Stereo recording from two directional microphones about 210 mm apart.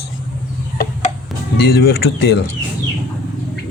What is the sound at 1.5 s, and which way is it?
Speech, 50° left (ahead or behind).